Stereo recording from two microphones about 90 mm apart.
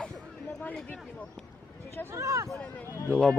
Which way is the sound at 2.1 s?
35° right (ahead or behind).